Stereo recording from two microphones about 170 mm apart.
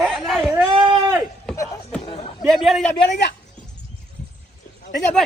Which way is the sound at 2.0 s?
40° left (ahead or behind).